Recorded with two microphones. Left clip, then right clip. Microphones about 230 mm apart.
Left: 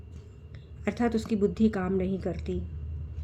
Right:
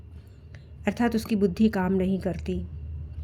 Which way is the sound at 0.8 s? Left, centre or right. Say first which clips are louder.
Right 2 dB; right.